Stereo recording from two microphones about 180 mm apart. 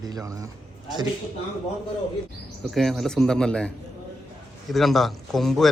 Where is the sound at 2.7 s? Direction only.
Centre (ahead or behind).